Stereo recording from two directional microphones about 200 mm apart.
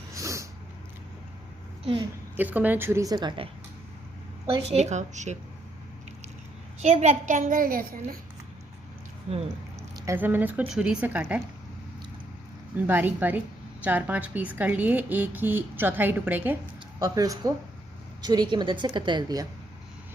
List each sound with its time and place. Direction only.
0.1 s a sound: 15° right (ahead or behind)
1.8 s a woman's voice: 25° right (ahead or behind)
2.3 s a woman's voice: 10° right (ahead or behind); by 3.5 s 25° right (ahead or behind)
4.7 s a woman's voice: 35° right (ahead or behind)
6.7 s a woman's voice: 35° right (ahead or behind)
9.9 s a woman's voice: 10° right (ahead or behind)
12.9 s a woman's voice: 10° right (ahead or behind)